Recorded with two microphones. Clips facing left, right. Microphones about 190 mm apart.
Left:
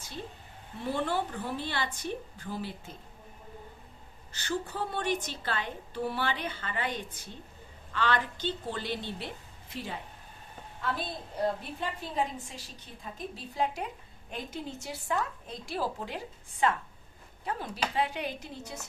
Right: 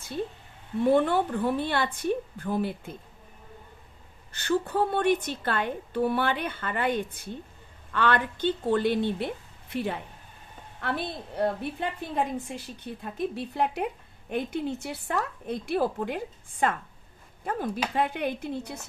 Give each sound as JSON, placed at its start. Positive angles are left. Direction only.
{"t": 0.9, "sound": "a woman's voice", "side_deg": -55}
{"t": 4.3, "sound": "a woman's voice", "side_deg": -55}